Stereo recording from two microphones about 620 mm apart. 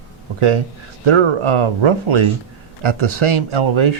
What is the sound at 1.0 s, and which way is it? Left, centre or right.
Speech, right.